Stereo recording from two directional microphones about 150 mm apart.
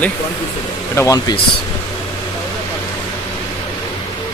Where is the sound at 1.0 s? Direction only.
25° left (ahead or behind).